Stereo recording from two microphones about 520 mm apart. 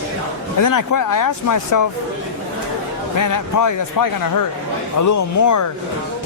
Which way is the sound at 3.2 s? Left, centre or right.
Left.